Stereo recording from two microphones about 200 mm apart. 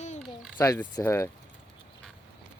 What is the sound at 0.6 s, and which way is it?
Speech, 15° left (ahead or behind).